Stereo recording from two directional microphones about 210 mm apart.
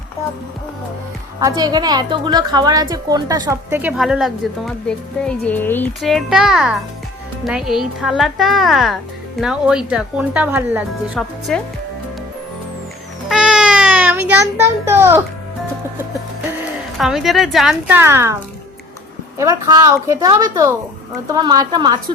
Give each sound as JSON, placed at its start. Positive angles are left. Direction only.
{"t": 1.4, "sound": "a woman's voice", "side_deg": -15}
{"t": 13.2, "sound": "cat", "side_deg": -5}
{"t": 17.0, "sound": "speech", "side_deg": 0}
{"t": 19.4, "sound": "a woman's voice", "side_deg": -15}